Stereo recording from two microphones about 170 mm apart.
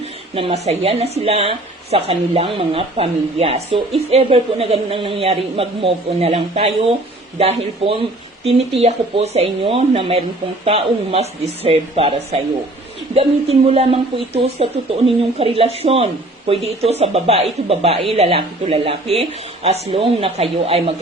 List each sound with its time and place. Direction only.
0.0 s speech: 35° right (ahead or behind)